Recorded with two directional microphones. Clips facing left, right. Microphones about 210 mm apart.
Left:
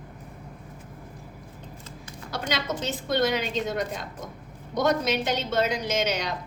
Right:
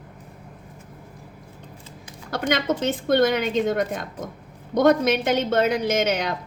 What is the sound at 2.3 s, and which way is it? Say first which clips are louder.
A woman's voice: right 7 dB; 55° right (ahead or behind).